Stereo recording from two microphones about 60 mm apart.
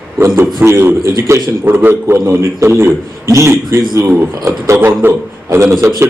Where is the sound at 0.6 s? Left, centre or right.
Right.